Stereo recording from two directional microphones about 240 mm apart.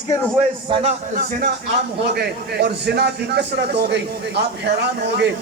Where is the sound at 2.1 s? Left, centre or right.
Right.